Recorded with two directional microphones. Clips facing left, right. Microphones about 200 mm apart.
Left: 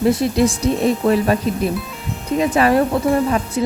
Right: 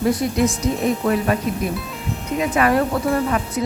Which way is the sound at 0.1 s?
25° left (ahead or behind).